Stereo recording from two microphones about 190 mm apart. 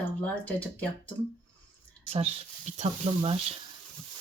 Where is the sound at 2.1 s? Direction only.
30° right (ahead or behind).